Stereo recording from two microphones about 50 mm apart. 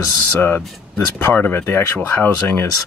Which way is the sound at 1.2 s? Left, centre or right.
Left.